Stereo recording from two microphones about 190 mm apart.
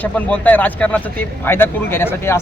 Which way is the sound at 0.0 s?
10° left (ahead or behind).